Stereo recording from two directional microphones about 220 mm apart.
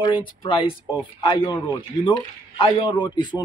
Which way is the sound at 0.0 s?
20° left (ahead or behind).